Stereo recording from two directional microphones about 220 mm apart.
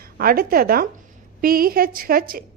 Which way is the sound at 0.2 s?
40° right (ahead or behind).